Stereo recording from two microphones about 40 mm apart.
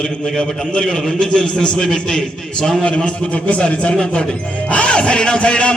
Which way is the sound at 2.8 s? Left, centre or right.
Left.